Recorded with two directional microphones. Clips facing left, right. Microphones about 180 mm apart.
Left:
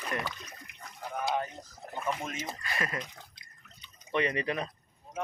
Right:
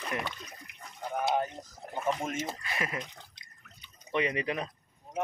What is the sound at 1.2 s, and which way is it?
Speech, 25° right (ahead or behind).